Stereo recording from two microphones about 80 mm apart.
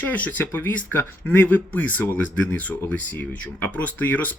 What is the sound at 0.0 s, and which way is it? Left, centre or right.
Speech, left.